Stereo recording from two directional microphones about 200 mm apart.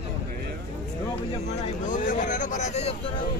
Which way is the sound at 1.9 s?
40° left (ahead or behind).